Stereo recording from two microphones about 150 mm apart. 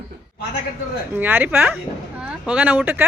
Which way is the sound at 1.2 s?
10° right (ahead or behind).